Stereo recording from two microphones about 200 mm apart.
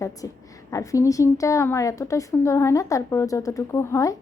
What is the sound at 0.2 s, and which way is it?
A woman's voice, 15° left (ahead or behind).